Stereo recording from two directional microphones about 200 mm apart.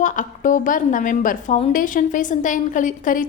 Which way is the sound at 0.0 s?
40° left (ahead or behind).